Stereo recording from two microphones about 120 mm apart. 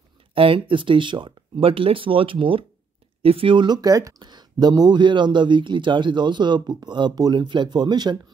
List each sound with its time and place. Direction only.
0.3 s speech: 50° right (ahead or behind)